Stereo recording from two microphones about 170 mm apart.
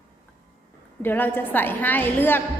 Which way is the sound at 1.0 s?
10° left (ahead or behind).